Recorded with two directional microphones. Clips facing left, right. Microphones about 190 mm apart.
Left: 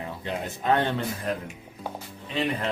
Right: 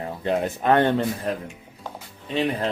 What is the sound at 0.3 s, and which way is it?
Speech, 60° right (ahead or behind).